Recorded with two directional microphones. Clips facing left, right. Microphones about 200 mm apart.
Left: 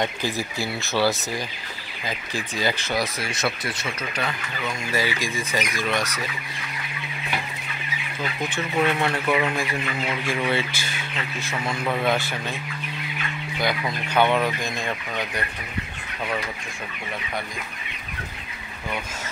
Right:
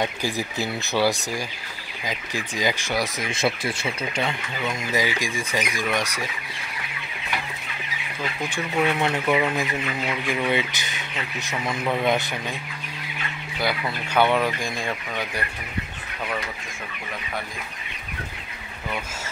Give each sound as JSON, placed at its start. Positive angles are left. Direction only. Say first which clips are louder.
{"t": 0.0, "sound": "speech", "louder": "even", "side_deg": -15}
{"t": 3.3, "sound": "speech", "louder": "right 3 dB", "side_deg": -25}
{"t": 8.8, "sound": "speech", "louder": "right 1 dB", "side_deg": -20}
{"t": 9.2, "sound": "speech", "louder": "right 2 dB", "side_deg": -10}
{"t": 10.5, "sound": "speech", "louder": "right 1 dB", "side_deg": -20}
{"t": 11.9, "sound": "speech", "louder": "right 1 dB", "side_deg": -20}
{"t": 14.0, "sound": "speech", "louder": "even", "side_deg": -10}